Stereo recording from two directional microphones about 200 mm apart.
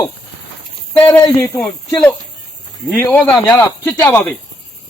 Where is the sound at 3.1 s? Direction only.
5° left (ahead or behind).